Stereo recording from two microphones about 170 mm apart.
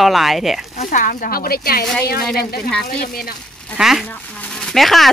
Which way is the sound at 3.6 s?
Centre (ahead or behind).